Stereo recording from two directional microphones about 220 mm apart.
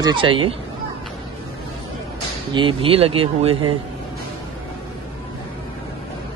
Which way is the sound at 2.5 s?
25° right (ahead or behind).